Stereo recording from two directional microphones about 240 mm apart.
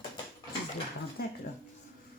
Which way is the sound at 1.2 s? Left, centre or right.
Left.